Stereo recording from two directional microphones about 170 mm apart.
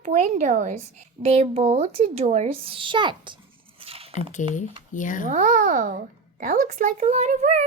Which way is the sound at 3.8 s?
35° right (ahead or behind).